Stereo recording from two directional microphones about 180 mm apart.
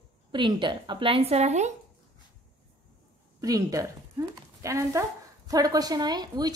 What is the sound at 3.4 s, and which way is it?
Speech, 20° right (ahead or behind).